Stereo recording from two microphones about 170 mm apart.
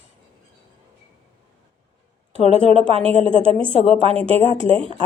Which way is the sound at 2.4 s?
35° right (ahead or behind).